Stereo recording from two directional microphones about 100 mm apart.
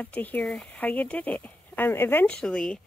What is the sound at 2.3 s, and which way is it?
Speech, 5° left (ahead or behind).